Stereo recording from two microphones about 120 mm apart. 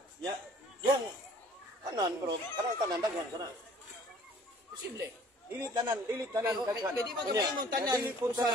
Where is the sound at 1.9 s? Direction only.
35° right (ahead or behind).